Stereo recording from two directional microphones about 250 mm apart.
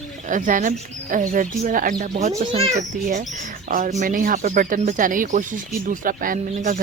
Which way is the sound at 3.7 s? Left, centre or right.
Right.